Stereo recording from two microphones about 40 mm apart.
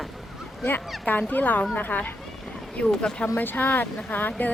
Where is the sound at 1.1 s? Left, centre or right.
Left.